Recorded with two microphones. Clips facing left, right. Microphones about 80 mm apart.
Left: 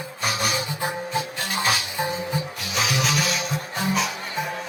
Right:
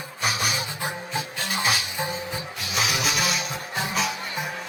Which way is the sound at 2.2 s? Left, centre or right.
Left.